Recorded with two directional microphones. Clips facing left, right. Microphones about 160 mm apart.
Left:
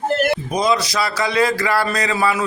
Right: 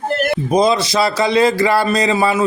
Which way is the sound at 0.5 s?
30° right (ahead or behind).